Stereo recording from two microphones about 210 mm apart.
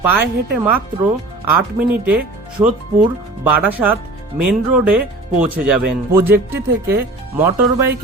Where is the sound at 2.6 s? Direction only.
15° right (ahead or behind).